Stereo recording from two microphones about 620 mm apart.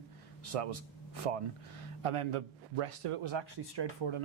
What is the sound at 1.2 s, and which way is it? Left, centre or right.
Speech, right.